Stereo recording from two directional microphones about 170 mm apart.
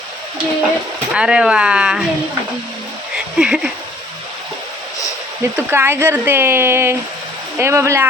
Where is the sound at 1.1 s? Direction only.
5° right (ahead or behind).